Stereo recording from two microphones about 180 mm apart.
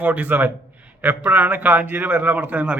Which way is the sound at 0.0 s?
10° right (ahead or behind).